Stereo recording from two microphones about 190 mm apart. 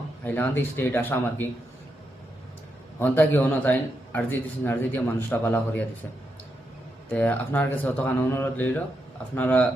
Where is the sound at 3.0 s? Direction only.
10° left (ahead or behind).